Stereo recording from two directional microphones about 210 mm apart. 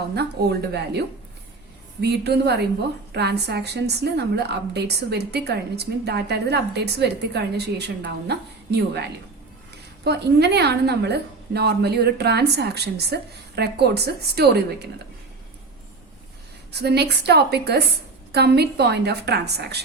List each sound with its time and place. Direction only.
0.7 s a woman's voice: 50° right (ahead or behind)
16.7 s a woman's voice: 50° right (ahead or behind)